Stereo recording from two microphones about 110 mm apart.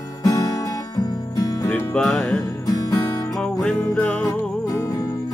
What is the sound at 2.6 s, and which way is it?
Music, 35° left (ahead or behind).